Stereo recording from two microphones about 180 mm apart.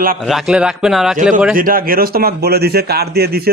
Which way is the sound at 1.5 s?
50° right (ahead or behind).